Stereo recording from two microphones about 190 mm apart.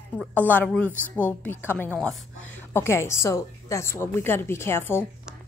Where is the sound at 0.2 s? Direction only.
10° right (ahead or behind).